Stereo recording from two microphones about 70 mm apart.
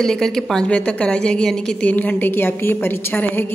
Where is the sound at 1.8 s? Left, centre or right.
Left.